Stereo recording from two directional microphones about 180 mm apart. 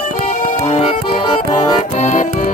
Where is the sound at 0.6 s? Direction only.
35° left (ahead or behind).